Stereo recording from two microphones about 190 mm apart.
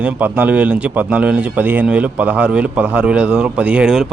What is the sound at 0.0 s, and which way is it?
Speech, 10° right (ahead or behind).